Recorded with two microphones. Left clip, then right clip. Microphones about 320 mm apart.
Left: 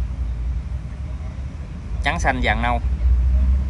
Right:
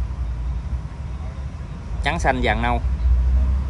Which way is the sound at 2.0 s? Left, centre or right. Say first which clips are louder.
Even; centre.